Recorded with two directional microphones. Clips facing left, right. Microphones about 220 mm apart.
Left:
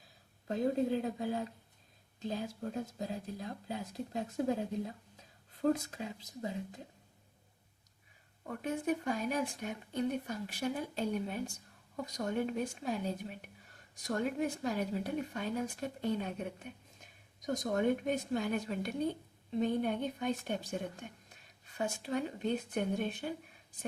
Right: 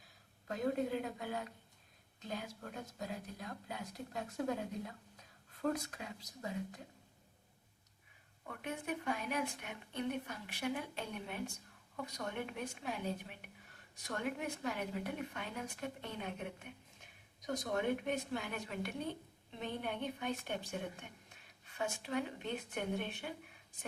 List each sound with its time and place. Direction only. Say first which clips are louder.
0.4 s speech: left 5 dB; 30° left (ahead or behind)
8.4 s speech: left 7 dB; 40° left (ahead or behind)
17.4 s speech: left 5 dB; 45° left (ahead or behind)
21.8 s speech: left 3 dB; 40° left (ahead or behind)